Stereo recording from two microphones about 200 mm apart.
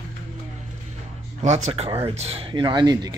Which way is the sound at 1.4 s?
30° right (ahead or behind).